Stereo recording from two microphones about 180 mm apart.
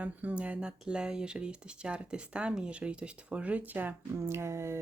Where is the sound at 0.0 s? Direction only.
10° right (ahead or behind).